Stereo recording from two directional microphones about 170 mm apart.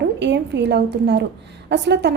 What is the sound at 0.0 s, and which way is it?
A woman's voice, 85° right.